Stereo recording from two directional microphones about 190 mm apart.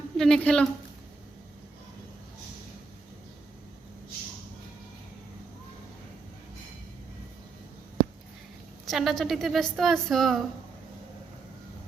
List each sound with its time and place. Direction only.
0.2 s a woman's voice: 5° left (ahead or behind)
8.9 s a woman's voice: centre (ahead or behind)